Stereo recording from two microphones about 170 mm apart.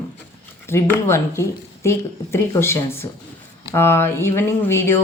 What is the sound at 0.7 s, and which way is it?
Speech, 15° left (ahead or behind).